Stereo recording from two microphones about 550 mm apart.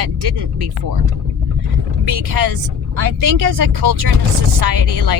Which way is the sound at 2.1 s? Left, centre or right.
Right.